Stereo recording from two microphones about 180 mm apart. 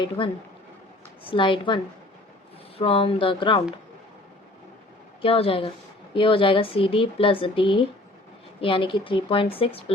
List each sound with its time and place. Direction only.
0.2 s speech: 30° left (ahead or behind)
5.2 s speech: 30° left (ahead or behind)